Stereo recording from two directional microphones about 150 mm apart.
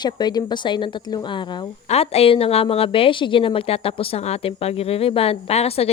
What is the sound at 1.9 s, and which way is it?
A woman's voice, 40° left (ahead or behind).